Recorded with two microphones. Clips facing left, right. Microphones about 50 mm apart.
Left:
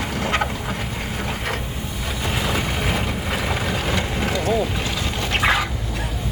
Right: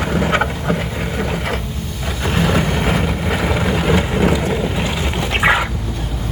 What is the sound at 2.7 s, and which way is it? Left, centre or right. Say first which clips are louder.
Vehicle: right 5 dB; centre.